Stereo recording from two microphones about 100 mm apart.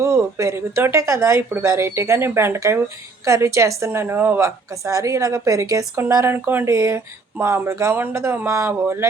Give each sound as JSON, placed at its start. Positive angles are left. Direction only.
{"t": 0.0, "sound": "a woman's voice", "side_deg": -30}